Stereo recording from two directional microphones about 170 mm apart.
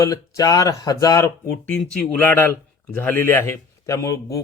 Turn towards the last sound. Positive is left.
turn(degrees=20)  # may be behind; listen again after turning